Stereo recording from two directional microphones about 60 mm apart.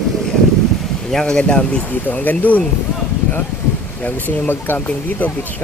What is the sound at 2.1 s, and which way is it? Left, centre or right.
Speech, left.